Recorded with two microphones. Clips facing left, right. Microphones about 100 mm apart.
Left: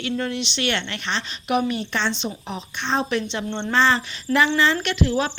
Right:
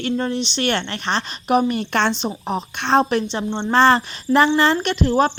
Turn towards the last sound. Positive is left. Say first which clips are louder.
# right 4 dB
turn(degrees=-45)  # may be behind; listen again after turning